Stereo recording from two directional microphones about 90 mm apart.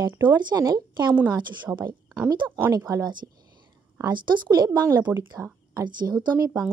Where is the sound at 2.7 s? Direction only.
45° right (ahead or behind).